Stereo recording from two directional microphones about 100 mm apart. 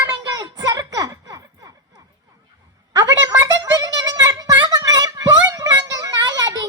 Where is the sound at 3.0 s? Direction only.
35° right (ahead or behind).